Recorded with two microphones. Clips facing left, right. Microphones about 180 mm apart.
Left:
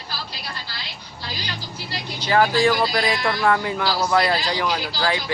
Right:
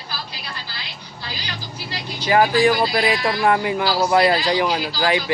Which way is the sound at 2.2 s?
15° right (ahead or behind).